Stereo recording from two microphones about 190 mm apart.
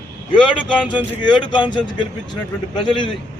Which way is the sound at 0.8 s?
5° right (ahead or behind).